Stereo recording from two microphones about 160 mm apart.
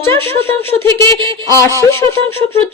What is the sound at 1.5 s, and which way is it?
Speech, 20° left (ahead or behind).